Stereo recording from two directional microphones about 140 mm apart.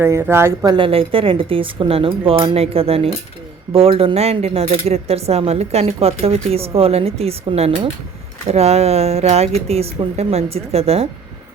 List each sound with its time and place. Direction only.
0.0 s speech: 15° right (ahead or behind)
0.7 s speech: 40° right (ahead or behind)